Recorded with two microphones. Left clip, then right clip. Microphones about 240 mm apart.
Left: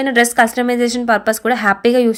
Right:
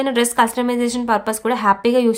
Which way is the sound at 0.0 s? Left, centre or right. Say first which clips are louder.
Left 4 dB; centre.